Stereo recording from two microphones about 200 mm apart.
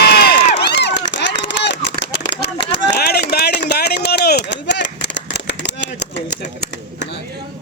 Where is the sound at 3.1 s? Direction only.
55° left (ahead or behind).